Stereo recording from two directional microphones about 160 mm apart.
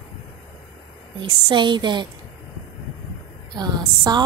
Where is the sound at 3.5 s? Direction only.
25° right (ahead or behind).